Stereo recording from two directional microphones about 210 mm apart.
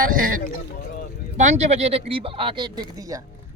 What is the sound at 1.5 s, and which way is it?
Speech, 30° right (ahead or behind).